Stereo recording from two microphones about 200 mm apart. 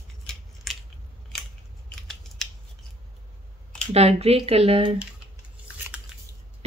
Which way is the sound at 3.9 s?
30° right (ahead or behind).